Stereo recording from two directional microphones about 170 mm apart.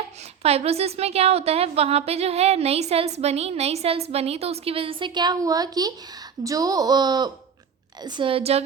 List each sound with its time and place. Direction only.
0.4 s a woman's voice: 35° right (ahead or behind)